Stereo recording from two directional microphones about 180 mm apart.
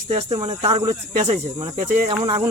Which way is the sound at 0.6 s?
35° right (ahead or behind).